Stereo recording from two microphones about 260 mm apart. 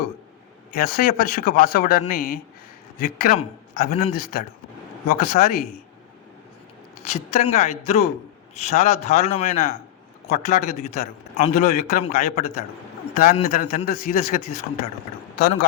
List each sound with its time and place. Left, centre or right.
0.7 s a man's voice: left
7.1 s a man's voice: left